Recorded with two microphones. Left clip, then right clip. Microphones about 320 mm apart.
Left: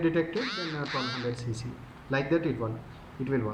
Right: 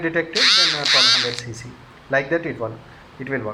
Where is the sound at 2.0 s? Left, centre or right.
Centre.